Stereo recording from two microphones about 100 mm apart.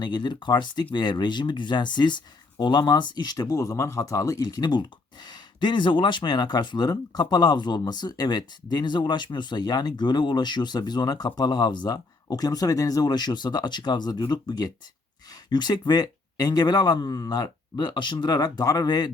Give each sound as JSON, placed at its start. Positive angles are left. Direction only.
{"t": 0.0, "sound": "speech", "side_deg": 45}
{"t": 4.4, "sound": "speech", "side_deg": 45}